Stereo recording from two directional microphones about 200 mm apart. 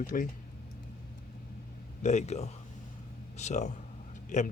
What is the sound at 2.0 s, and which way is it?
Speech, 35° left (ahead or behind).